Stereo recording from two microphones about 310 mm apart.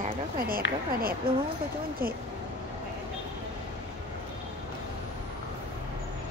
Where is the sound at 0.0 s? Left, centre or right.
Right.